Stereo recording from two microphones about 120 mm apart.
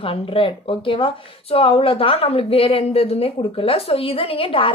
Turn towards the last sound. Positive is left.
turn(degrees=50)  # may be behind; listen again after turning